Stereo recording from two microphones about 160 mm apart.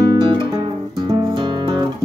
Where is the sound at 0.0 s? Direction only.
30° right (ahead or behind).